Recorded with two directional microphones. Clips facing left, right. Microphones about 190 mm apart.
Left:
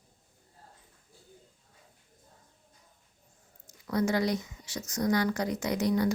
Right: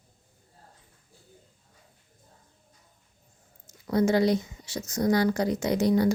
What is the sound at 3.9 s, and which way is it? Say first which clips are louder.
Speech: right 5 dB; 30° right (ahead or behind).